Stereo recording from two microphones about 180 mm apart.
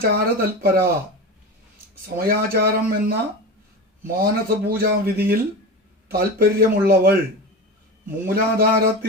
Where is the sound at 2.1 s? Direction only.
55° right (ahead or behind).